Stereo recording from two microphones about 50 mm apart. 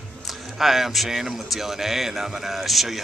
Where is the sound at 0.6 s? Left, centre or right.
Centre.